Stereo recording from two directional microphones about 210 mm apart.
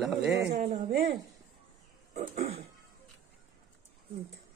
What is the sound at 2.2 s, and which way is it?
Throat clearing, 30° right (ahead or behind).